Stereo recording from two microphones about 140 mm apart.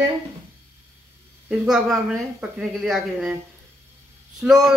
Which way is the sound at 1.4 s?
Centre (ahead or behind).